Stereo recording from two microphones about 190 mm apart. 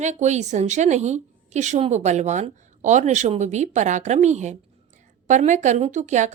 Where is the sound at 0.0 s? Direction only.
40° right (ahead or behind).